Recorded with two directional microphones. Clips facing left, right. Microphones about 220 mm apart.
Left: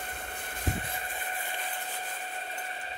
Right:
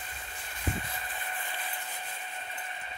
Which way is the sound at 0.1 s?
60° left (ahead or behind).